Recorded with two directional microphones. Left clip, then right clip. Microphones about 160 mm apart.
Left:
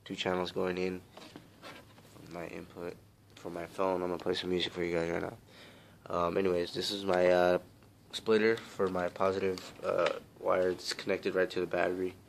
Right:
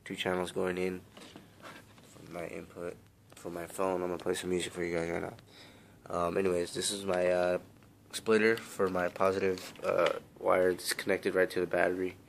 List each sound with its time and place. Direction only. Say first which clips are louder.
0.1 s speech: even; centre (ahead or behind)
2.3 s speech: right 2 dB; 5° right (ahead or behind)
7.1 s speech: left 3 dB; 20° left (ahead or behind)
8.1 s speech: right 1 dB; 5° right (ahead or behind)